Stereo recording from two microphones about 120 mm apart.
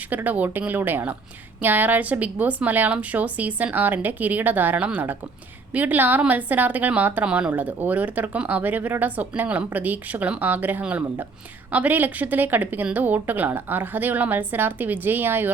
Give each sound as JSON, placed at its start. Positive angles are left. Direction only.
{"t": 0.1, "sound": "a woman's voice", "side_deg": -15}